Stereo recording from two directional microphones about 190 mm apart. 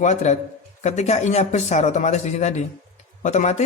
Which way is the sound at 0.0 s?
40° left (ahead or behind).